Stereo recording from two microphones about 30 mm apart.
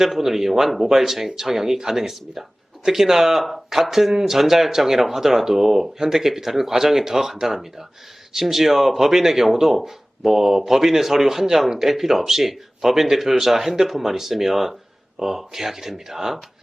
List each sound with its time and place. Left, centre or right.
0.0 s speech: centre